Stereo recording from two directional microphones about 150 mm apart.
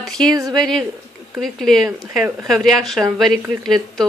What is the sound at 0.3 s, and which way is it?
Speech, 25° right (ahead or behind).